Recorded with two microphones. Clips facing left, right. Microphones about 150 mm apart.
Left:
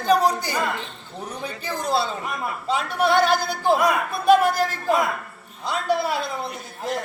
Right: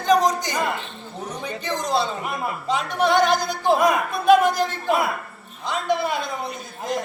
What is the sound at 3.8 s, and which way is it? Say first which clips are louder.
Speech: right 2 dB; 15° right (ahead or behind).